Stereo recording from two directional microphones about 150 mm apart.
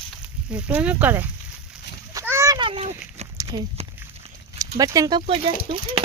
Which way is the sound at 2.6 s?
35° right (ahead or behind).